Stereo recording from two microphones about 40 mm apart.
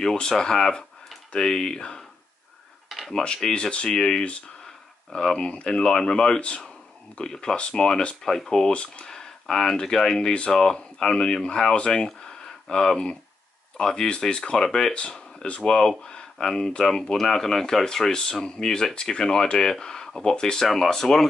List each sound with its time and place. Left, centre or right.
0.0 s speech: centre
3.1 s speech: centre
6.4 s speech: left
7.2 s speech: centre
8.7 s speech: left
9.1 s speech: centre
12.2 s a sound: centre
13.7 s speech: centre
15.0 s a sound: centre
15.6 s speech: left
20.1 s a sound: centre
20.3 s speech: left
20.6 s speech: centre